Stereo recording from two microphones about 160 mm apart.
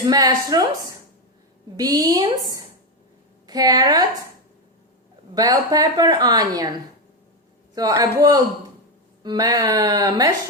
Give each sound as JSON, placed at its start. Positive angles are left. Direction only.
{"t": 0.1, "sound": "speech", "side_deg": -25}
{"t": 1.7, "sound": "a woman's voice", "side_deg": -25}
{"t": 5.3, "sound": "speech", "side_deg": -25}
{"t": 7.8, "sound": "speech", "side_deg": -25}